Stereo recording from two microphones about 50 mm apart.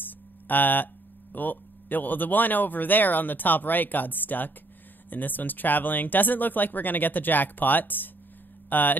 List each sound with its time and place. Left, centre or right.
0.5 s speech: left